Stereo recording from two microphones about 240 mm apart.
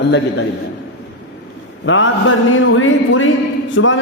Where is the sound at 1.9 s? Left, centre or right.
Left.